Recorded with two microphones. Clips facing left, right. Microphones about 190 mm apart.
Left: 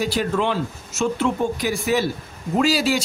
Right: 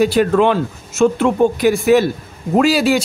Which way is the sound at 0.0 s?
60° right (ahead or behind).